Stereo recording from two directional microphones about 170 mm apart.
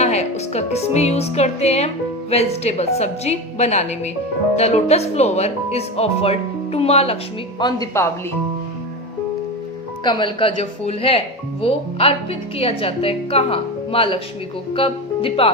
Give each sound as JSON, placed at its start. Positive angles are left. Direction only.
{"t": 0.0, "sound": "speech", "side_deg": 40}
{"t": 7.6, "sound": "speech", "side_deg": 20}
{"t": 10.0, "sound": "speech", "side_deg": 30}